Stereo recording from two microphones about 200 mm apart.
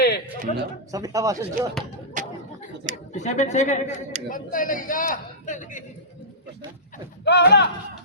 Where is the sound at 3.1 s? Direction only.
35° left (ahead or behind).